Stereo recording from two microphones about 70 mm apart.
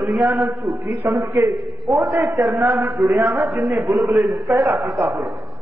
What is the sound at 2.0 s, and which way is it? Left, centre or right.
A man's voice, right.